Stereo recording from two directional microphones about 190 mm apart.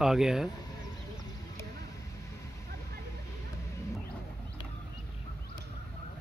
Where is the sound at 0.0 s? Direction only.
5° right (ahead or behind).